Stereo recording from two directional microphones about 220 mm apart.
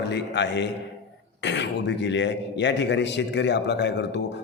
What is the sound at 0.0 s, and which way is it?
A man's voice, 50° left (ahead or behind).